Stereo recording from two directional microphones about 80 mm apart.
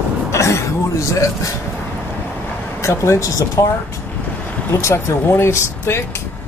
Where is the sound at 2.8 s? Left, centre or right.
Left.